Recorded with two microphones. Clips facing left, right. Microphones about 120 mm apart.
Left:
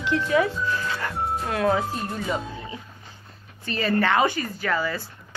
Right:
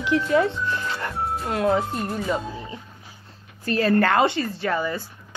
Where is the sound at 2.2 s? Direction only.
5° left (ahead or behind).